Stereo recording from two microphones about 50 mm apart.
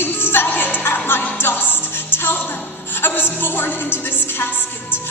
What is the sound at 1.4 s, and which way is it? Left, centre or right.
Music, left.